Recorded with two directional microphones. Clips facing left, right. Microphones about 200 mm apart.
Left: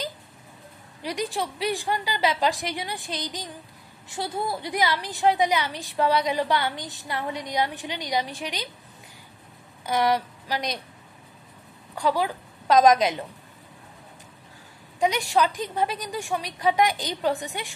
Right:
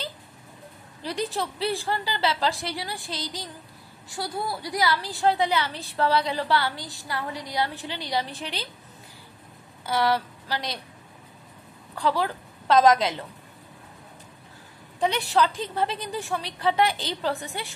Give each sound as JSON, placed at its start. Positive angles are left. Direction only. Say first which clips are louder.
{"t": 1.0, "sound": "a woman's voice", "louder": "even", "side_deg": 10}
{"t": 9.8, "sound": "speech", "louder": "left 1 dB", "side_deg": 15}
{"t": 11.9, "sound": "a woman's voice", "louder": "left 1 dB", "side_deg": 10}
{"t": 15.0, "sound": "a woman's voice", "louder": "left 1 dB", "side_deg": 10}